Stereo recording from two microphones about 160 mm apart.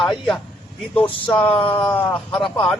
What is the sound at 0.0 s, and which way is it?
Speech, centre (ahead or behind).